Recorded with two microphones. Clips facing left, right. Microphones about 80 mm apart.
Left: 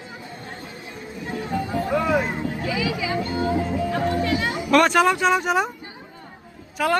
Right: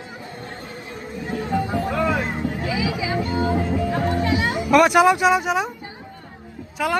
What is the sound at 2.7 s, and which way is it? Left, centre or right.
Vehicle, centre.